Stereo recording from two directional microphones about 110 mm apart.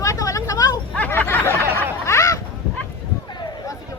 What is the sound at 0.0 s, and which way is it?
Vehicle, 30° left (ahead or behind).